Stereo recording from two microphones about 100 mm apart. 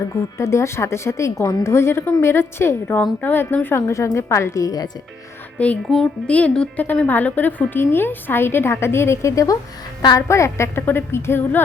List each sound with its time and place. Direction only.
0.1 s a woman's voice: 30° left (ahead or behind)
5.5 s a woman's voice: 10° left (ahead or behind)